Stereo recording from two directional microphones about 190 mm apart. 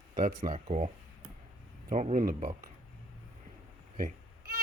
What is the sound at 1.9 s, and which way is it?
Speech, 40° right (ahead or behind).